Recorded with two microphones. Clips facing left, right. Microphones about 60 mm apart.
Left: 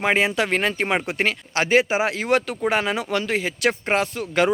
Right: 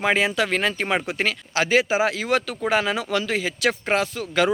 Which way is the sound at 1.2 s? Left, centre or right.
Left.